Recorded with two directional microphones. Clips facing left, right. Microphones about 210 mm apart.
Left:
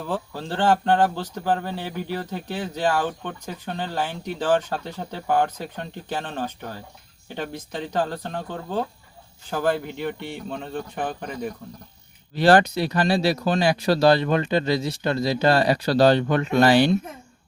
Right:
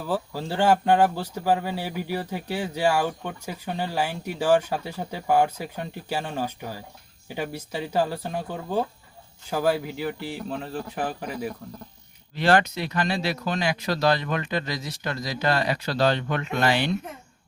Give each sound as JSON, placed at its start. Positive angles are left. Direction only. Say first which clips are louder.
{"t": 0.0, "sound": "speech", "louder": "right 1 dB", "side_deg": -10}
{"t": 12.3, "sound": "speech", "louder": "left 4 dB", "side_deg": 35}